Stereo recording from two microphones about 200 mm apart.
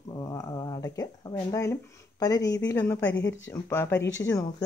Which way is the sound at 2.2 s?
20° left (ahead or behind).